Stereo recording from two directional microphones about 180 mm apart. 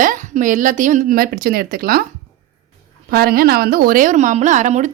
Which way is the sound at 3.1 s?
60° right (ahead or behind).